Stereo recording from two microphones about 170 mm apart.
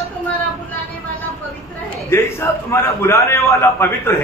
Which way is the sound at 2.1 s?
15° left (ahead or behind).